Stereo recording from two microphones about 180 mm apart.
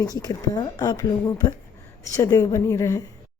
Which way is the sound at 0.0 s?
20° left (ahead or behind).